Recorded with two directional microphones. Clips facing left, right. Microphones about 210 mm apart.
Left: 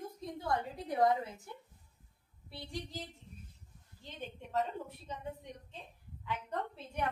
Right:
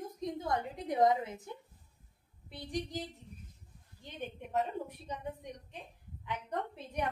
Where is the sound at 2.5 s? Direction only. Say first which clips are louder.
Right 5 dB; 15° right (ahead or behind).